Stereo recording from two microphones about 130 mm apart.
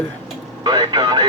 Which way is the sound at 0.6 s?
35° right (ahead or behind).